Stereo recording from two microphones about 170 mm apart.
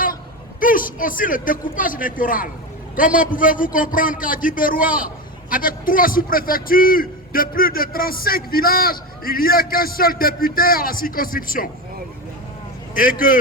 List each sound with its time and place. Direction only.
0.6 s a man's voice: 55° left (ahead or behind)
12.9 s a man's voice: 55° left (ahead or behind)